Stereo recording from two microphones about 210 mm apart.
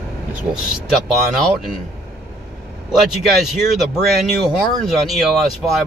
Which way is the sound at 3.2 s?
Centre (ahead or behind).